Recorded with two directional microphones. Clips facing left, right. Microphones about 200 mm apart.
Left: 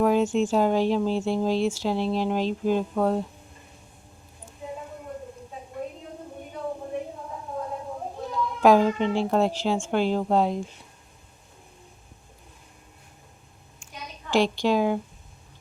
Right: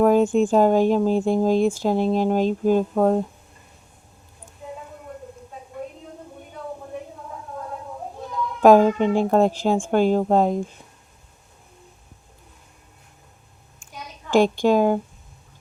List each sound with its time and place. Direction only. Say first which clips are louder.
0.0 s speech: right 5 dB; 50° right (ahead or behind)
8.6 s speech: right 5 dB; 50° right (ahead or behind)
14.3 s speech: right 5 dB; 50° right (ahead or behind)